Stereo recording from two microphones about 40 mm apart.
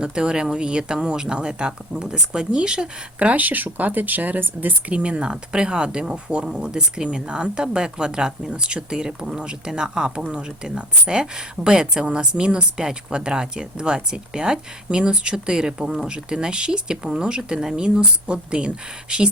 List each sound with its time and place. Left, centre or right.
0.0 s speech: right
3.2 s speech: right
4.9 s speech: right